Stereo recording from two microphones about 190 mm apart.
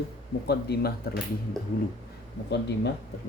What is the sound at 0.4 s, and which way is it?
Speech, 55° left (ahead or behind).